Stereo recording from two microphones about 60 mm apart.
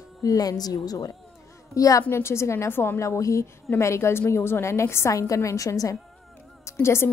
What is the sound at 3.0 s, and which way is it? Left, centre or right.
A woman's voice, left.